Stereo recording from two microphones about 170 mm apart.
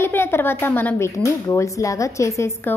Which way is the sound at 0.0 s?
15° left (ahead or behind).